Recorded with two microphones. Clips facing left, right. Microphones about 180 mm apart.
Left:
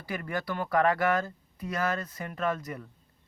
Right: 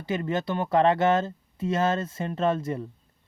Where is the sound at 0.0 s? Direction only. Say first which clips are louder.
Right 6 dB; 25° right (ahead or behind).